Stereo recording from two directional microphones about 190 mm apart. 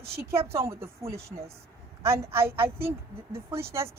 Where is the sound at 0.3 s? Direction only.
15° right (ahead or behind).